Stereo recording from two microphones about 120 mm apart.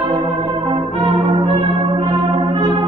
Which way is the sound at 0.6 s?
45° right (ahead or behind).